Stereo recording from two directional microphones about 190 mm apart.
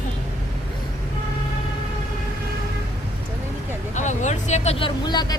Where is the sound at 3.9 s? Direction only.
40° left (ahead or behind); by 5.4 s 20° left (ahead or behind).